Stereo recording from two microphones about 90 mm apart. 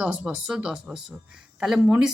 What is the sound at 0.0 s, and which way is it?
Speech, 10° right (ahead or behind).